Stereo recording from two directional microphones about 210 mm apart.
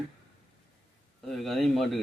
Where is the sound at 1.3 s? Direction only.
Centre (ahead or behind).